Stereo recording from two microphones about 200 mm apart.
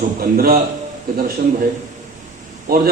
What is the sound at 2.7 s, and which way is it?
Speech, 45° right (ahead or behind).